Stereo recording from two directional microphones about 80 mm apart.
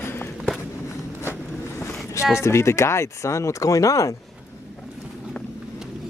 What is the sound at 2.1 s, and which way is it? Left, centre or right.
Speech, left.